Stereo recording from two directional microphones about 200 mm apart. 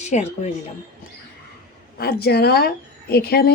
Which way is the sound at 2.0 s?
50° left (ahead or behind).